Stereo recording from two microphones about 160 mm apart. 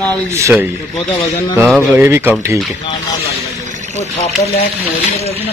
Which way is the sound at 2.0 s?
15° right (ahead or behind).